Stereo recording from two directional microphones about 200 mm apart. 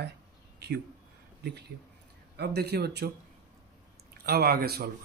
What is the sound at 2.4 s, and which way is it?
Speech, 55° right (ahead or behind).